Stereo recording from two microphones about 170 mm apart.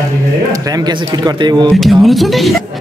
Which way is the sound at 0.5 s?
20° right (ahead or behind).